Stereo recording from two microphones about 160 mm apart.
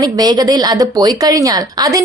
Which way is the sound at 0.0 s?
25° right (ahead or behind).